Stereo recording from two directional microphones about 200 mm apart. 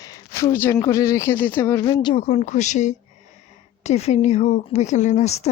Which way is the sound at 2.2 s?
35° left (ahead or behind).